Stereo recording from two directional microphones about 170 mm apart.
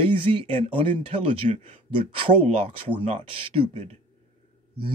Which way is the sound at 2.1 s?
35° right (ahead or behind).